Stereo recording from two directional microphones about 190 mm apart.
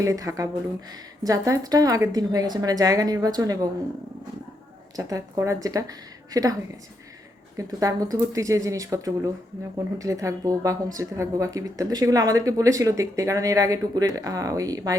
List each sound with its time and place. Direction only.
0.0 s a woman's voice: 15° right (ahead or behind)
4.9 s a woman's voice: 20° right (ahead or behind)